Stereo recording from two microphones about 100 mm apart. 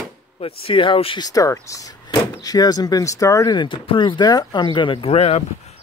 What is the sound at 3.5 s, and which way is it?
Speech, 55° left (ahead or behind).